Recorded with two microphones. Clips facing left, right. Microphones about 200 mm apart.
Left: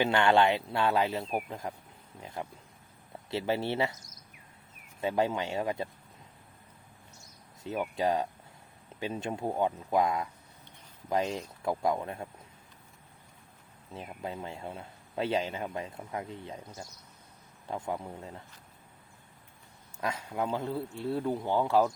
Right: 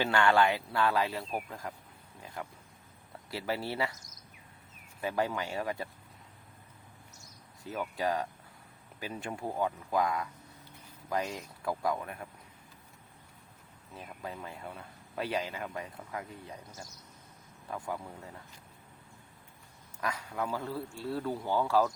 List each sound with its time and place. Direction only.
0.0 s speech: 20° left (ahead or behind)
2.2 s wild animals: 25° left (ahead or behind)
3.2 s speech: 25° left (ahead or behind)
4.9 s speech: 20° left (ahead or behind)
7.6 s speech: 25° left (ahead or behind)
13.9 s speech: 25° left (ahead or behind)
20.0 s speech: 25° left (ahead or behind)